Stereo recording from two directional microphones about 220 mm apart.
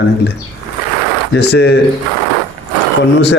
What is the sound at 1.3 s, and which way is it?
Speech, 50° left (ahead or behind).